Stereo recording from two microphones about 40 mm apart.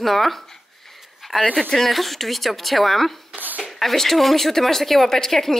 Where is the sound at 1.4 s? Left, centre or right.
Left.